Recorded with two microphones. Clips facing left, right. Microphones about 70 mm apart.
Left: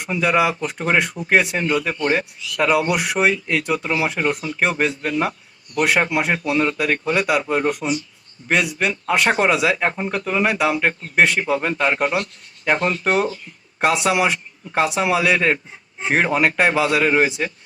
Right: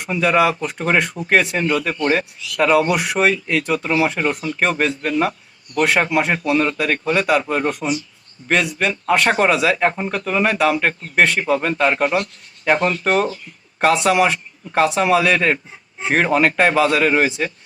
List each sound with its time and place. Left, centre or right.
0.0 s a man's voice: centre